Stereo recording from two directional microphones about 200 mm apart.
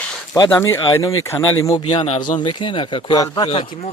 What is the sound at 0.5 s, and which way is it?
Speech, 15° left (ahead or behind).